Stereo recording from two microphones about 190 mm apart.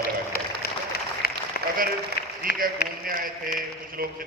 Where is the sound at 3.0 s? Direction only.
50° right (ahead or behind).